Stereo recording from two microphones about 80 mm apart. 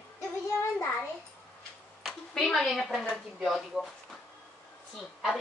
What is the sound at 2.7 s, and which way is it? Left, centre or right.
Speech, centre.